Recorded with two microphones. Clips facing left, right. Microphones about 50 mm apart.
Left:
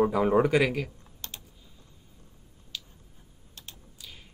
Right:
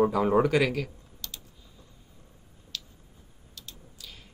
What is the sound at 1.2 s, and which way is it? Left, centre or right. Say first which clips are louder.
Typing: even; left.